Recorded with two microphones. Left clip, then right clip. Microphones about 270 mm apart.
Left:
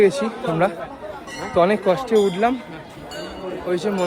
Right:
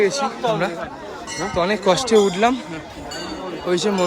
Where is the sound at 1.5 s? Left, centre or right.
Centre.